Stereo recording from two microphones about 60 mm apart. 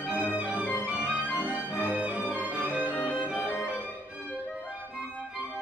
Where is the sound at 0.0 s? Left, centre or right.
Right.